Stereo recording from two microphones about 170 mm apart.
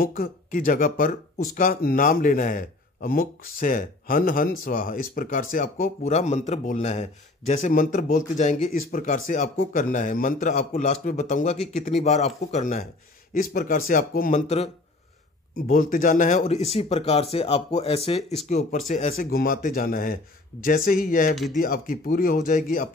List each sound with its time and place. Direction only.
0.0 s a man's voice: 55° left (ahead or behind)
13.3 s speech: 55° left (ahead or behind)
15.5 s a man's voice: 55° left (ahead or behind)
19.3 s speech: 55° left (ahead or behind)